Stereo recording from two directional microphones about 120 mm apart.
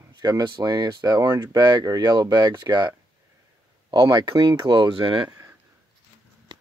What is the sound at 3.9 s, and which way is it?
Speech, 35° right (ahead or behind).